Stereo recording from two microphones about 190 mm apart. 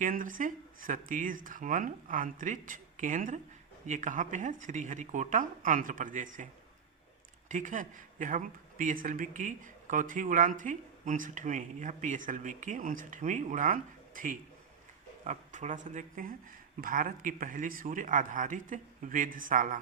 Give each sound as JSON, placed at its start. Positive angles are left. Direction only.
{"t": 0.0, "sound": "speech", "side_deg": -45}